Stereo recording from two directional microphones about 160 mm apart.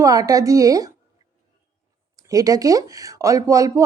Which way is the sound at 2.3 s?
20° right (ahead or behind).